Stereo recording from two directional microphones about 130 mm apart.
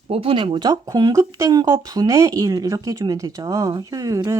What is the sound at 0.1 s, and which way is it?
Speech, 45° right (ahead or behind).